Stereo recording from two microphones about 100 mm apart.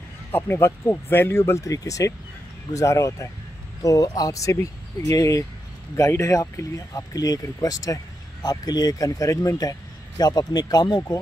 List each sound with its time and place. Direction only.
0.3 s speech: 25° left (ahead or behind); by 11.0 s 45° left (ahead or behind)